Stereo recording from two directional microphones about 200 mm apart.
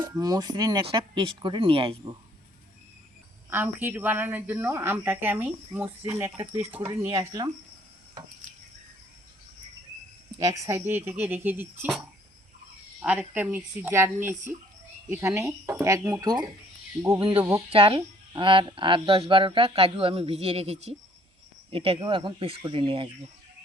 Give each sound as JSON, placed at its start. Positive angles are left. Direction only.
{"t": 0.0, "sound": "speech", "side_deg": -20}
{"t": 3.5, "sound": "speech", "side_deg": -10}
{"t": 10.3, "sound": "speech", "side_deg": -15}
{"t": 13.0, "sound": "speech", "side_deg": -10}
{"t": 17.3, "sound": "speech", "side_deg": -5}
{"t": 17.7, "sound": "speech", "side_deg": -25}